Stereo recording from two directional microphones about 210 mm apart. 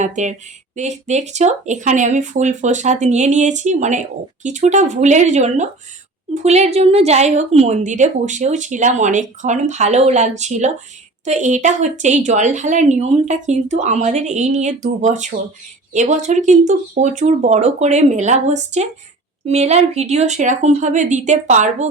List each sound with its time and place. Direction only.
0.0 s a woman's voice: 35° right (ahead or behind)